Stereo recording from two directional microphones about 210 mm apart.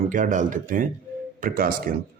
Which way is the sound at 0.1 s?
40° right (ahead or behind).